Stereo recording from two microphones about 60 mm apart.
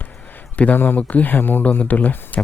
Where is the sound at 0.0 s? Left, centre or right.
Left.